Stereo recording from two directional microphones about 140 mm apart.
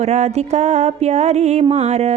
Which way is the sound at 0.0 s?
55° right (ahead or behind).